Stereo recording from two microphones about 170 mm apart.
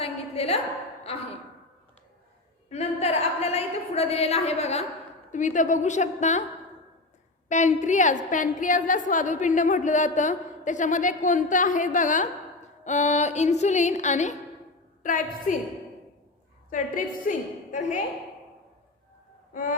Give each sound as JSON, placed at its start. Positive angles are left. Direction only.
{"t": 0.0, "sound": "a sound", "side_deg": 35}
{"t": 2.6, "sound": "a woman's voice", "side_deg": 40}
{"t": 7.4, "sound": "a woman's voice", "side_deg": 45}
{"t": 16.6, "sound": "a woman's voice", "side_deg": 50}